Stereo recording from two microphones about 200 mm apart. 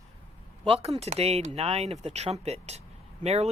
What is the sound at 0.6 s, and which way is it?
Speech, 30° right (ahead or behind).